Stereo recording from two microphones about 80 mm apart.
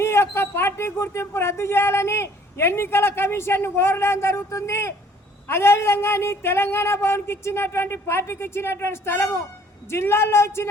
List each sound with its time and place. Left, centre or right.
0.0 s speech: left